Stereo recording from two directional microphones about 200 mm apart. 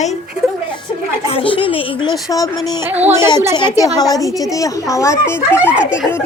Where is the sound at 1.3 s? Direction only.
25° left (ahead or behind).